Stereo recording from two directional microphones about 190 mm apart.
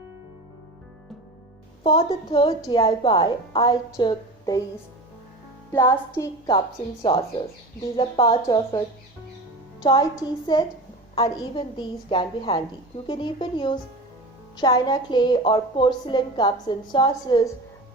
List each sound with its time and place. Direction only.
1.8 s a woman's voice: 30° left (ahead or behind)
5.7 s music: 15° left (ahead or behind)
7.0 s a woman's voice: 25° left (ahead or behind)
9.8 s a woman's voice: 20° left (ahead or behind)